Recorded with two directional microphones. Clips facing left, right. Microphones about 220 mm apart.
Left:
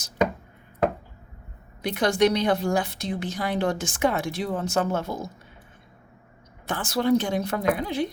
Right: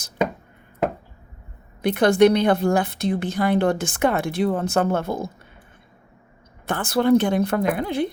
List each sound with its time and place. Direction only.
1.8 s a woman's voice: 55° right (ahead or behind)
6.7 s a woman's voice: 55° right (ahead or behind)